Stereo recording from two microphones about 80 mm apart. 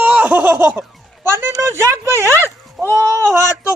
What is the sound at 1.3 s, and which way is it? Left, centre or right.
Speech, right.